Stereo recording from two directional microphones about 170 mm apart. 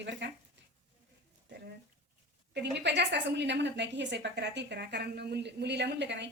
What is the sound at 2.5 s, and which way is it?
A woman's voice, 90° right.